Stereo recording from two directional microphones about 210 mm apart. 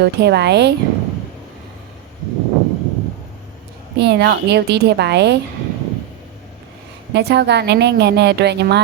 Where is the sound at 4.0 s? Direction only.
55° right (ahead or behind).